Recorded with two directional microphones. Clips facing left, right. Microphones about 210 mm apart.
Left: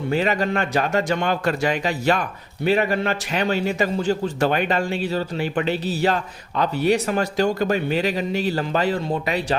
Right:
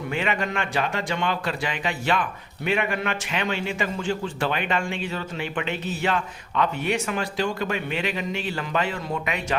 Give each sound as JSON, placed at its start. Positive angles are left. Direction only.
{"t": 0.1, "sound": "a man's voice", "side_deg": 35}